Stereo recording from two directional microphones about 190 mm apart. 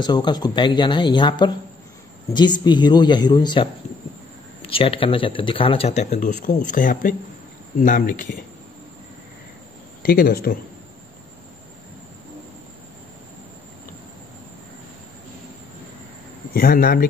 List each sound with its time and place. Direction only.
0.0 s speech: 25° left (ahead or behind); by 8.3 s 45° left (ahead or behind)
10.0 s speech: 50° left (ahead or behind)
16.5 s speech: 50° left (ahead or behind)